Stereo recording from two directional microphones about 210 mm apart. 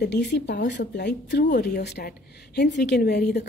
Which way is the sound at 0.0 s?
55° left (ahead or behind).